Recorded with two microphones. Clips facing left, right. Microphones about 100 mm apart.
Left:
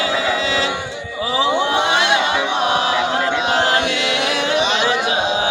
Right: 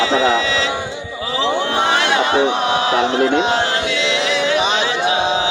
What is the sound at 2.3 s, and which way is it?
Chant, 35° right (ahead or behind).